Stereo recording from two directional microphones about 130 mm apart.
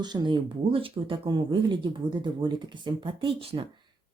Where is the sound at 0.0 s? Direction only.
35° right (ahead or behind).